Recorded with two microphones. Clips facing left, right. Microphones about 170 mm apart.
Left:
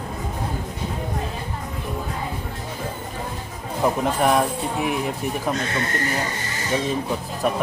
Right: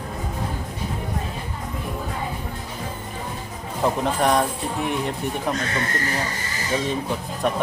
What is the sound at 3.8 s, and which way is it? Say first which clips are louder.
Speech: left 1 dB; 5° left (ahead or behind).